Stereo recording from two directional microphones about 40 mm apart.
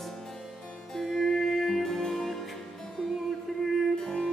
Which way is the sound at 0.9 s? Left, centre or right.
Centre.